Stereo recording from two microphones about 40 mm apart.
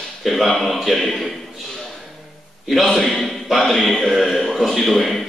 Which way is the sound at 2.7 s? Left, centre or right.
Centre.